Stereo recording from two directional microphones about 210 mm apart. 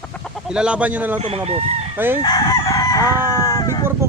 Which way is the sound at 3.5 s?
15° left (ahead or behind).